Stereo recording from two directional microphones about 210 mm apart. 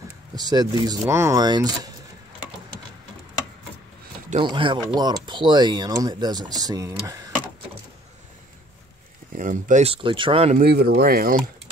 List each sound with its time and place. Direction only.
0.4 s speech: 20° right (ahead or behind)
4.3 s speech: 25° right (ahead or behind)
9.3 s speech: 40° right (ahead or behind)
10.6 s speech: 50° right (ahead or behind)